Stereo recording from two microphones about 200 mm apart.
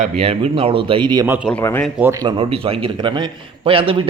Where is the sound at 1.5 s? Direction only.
10° left (ahead or behind).